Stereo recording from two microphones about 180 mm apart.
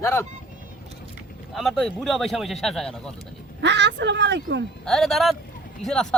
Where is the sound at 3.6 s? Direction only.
75° right (ahead or behind).